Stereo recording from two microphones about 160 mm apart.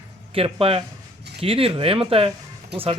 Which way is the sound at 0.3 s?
35° right (ahead or behind).